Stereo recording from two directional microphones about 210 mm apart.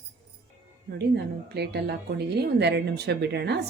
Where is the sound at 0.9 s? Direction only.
50° right (ahead or behind).